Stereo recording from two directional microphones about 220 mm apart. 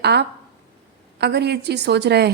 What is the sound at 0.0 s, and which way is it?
A woman's voice, 50° right (ahead or behind).